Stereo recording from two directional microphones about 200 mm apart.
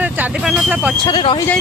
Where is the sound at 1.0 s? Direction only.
25° left (ahead or behind).